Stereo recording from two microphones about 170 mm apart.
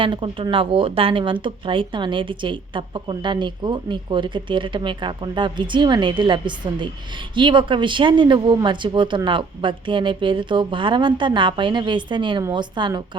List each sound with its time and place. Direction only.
0.0 s speech: 30° right (ahead or behind)